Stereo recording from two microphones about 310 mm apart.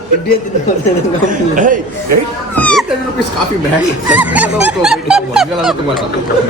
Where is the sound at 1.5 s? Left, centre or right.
Right.